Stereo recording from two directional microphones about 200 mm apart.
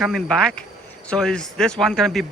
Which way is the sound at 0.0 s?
Centre (ahead or behind).